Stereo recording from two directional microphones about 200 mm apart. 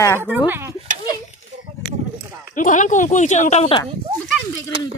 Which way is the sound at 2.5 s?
40° left (ahead or behind).